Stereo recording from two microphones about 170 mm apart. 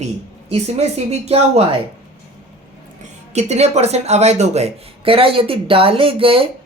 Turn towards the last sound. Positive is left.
turn(degrees=-30)  # may be behind; listen again after turning